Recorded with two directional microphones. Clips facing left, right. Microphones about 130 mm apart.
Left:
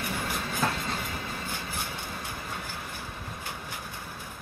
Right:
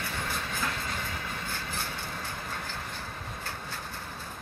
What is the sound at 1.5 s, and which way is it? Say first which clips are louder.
Vehicle: left 1 dB; 15° left (ahead or behind).